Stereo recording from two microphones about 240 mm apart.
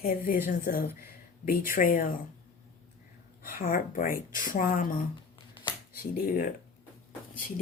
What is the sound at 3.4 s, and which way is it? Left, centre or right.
A woman's voice, left.